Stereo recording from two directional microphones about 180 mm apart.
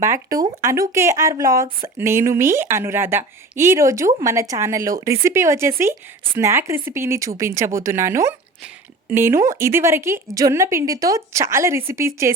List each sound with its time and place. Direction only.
0.0 s speech: 15° right (ahead or behind)